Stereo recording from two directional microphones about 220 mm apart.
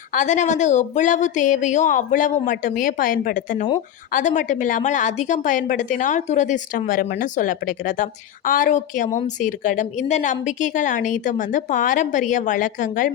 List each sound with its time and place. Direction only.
0.1 s a woman's voice: 35° left (ahead or behind)